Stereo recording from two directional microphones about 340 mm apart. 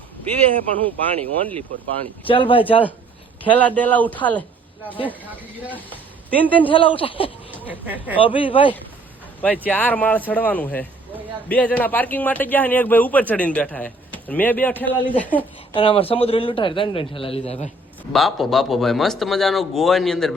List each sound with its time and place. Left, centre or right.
0.9 s speech: centre
2.2 s a man's voice: centre
3.4 s speech: centre
6.7 s a man's voice: centre
7.5 s speech: centre
8.2 s a man's voice: centre
9.4 s speech: centre
15.7 s a man's voice: centre
18.1 s speech: centre